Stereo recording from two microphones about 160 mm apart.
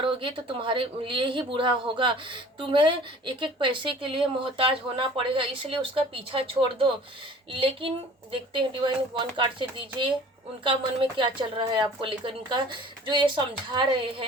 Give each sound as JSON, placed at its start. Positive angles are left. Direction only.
{"t": 0.0, "sound": "speech", "side_deg": -30}
{"t": 11.2, "sound": "a woman's voice", "side_deg": -30}